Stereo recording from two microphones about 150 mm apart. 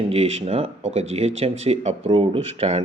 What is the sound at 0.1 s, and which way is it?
Speech, 45° right (ahead or behind).